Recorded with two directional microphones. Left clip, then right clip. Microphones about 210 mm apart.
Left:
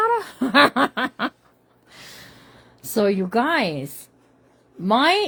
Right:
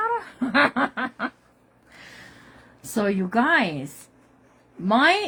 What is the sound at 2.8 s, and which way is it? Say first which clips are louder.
A woman's voice: left 4 dB; 40° left (ahead or behind).